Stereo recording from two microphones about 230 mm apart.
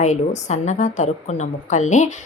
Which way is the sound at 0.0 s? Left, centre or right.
Left.